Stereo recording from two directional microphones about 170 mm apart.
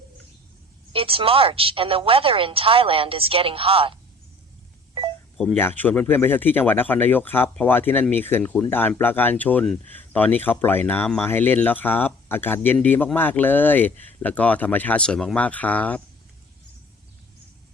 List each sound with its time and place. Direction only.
0.9 s a woman's voice: 35° right (ahead or behind)
5.4 s speech: 10° left (ahead or behind)